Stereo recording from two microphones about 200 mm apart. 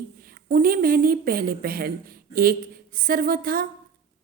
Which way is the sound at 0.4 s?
45° right (ahead or behind).